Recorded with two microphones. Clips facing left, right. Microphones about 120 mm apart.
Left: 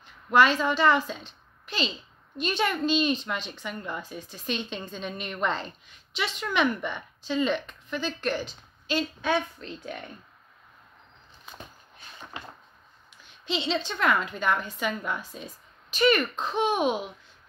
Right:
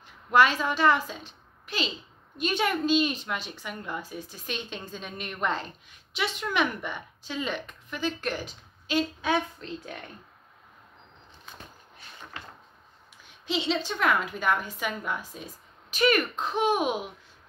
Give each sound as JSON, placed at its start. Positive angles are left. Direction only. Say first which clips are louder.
{"t": 0.3, "sound": "a woman's voice", "louder": "left 1 dB", "side_deg": -10}
{"t": 12.4, "sound": "a sound", "louder": "left 3 dB", "side_deg": 15}
{"t": 13.2, "sound": "a woman's voice", "louder": "even", "side_deg": -10}